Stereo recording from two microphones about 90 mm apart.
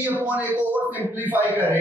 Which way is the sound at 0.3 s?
20° right (ahead or behind).